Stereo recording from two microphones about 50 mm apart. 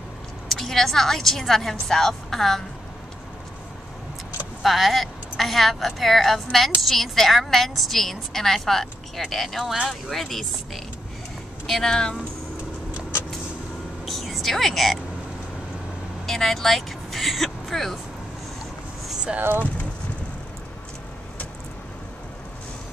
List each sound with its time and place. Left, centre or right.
0.5 s a woman's voice: centre
4.6 s a woman's voice: centre
11.9 s speech: centre
14.0 s a sound: centre
16.3 s speech: centre
19.3 s speech: right